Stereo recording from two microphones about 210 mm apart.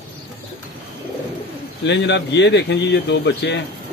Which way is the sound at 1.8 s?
55° left (ahead or behind).